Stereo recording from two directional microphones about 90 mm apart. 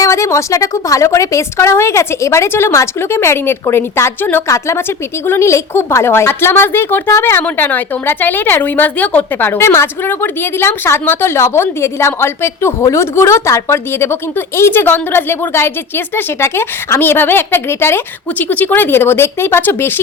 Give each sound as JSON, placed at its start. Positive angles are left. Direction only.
{"t": 0.0, "sound": "a woman's voice", "side_deg": 35}
{"t": 4.4, "sound": "a woman's voice", "side_deg": 35}